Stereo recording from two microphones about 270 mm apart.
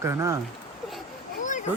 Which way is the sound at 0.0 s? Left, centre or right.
Centre.